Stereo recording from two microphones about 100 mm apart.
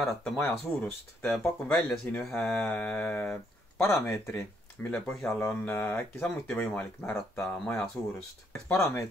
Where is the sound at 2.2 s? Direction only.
5° left (ahead or behind); by 4.9 s 20° left (ahead or behind).